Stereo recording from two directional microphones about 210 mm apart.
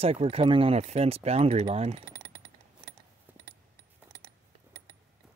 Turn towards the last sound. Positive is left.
turn(degrees=-10)  # may be behind; listen again after turning